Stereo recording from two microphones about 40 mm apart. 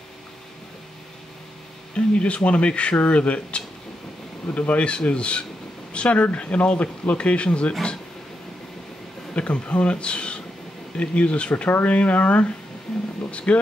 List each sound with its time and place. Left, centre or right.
2.0 s speech: left
9.3 s speech: left
11.5 s speech: left